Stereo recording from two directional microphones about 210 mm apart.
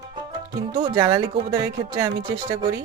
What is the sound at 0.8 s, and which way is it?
Music, 20° right (ahead or behind).